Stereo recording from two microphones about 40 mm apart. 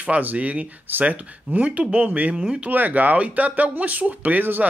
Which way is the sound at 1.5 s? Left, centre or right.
Right.